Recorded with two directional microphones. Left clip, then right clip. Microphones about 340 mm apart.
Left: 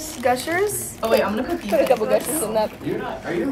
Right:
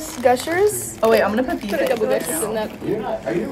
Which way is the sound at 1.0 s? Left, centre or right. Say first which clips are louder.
Right 4 dB; centre.